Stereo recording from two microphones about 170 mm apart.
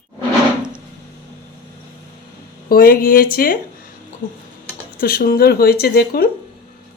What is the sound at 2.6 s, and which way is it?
Speech, 60° left (ahead or behind).